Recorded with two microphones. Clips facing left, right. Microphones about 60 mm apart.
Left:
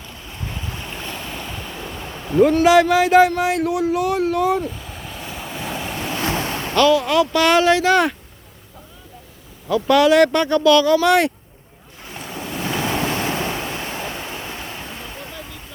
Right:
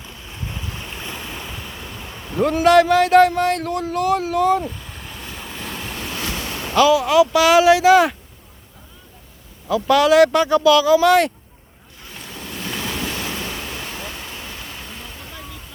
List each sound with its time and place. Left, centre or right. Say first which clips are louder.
0.8 s boat: left 1 dB; centre
6.1 s waves: left 6 dB; left
6.7 s speech: right 2 dB; centre
9.6 s speech: left 1 dB; centre
12.0 s waves: left 4 dB; left